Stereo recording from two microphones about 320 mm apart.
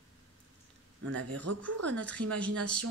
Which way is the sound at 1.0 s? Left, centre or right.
Right.